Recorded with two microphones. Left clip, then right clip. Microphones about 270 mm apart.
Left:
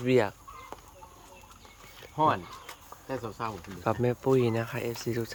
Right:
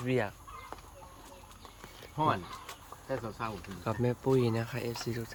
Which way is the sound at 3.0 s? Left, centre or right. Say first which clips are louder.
Left 2 dB; left.